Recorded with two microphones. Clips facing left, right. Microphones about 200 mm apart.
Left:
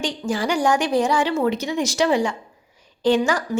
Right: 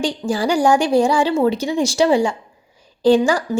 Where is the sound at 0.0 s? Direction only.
35° right (ahead or behind).